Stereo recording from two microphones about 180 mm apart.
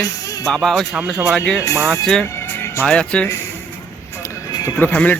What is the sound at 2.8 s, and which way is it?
Speech, 5° left (ahead or behind).